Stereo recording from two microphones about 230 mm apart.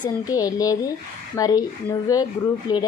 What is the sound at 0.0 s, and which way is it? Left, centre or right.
Speech, centre.